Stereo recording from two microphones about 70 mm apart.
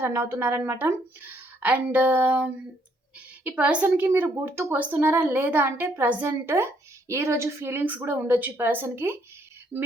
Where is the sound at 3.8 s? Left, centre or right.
Right.